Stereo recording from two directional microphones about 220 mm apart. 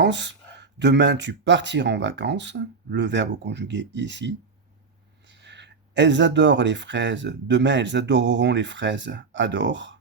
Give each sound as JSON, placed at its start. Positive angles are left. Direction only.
{"t": 0.0, "sound": "speech", "side_deg": -50}